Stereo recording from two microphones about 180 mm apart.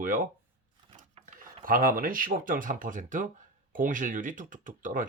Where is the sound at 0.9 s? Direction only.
50° right (ahead or behind).